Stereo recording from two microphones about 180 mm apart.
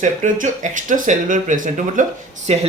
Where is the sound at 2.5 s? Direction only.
35° right (ahead or behind).